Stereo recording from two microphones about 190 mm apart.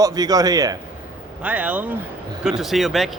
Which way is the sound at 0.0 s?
20° right (ahead or behind).